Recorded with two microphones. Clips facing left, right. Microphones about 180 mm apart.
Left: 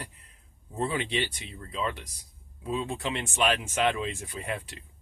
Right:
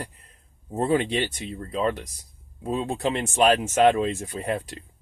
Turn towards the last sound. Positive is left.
turn(degrees=-40)  # may be behind; listen again after turning